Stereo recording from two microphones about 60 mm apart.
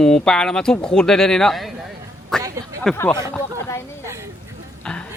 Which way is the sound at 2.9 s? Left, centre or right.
Centre.